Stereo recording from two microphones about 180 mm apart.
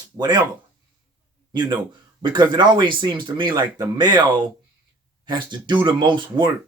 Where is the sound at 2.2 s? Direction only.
25° right (ahead or behind).